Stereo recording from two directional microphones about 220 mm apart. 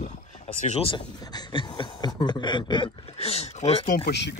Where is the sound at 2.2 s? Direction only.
20° left (ahead or behind).